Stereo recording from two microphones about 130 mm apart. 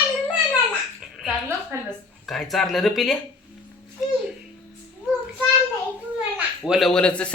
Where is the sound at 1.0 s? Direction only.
Centre (ahead or behind).